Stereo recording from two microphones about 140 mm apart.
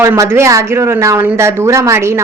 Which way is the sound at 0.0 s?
20° right (ahead or behind).